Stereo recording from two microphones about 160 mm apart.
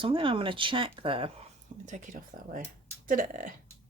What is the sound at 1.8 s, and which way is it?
Speech, 50° right (ahead or behind).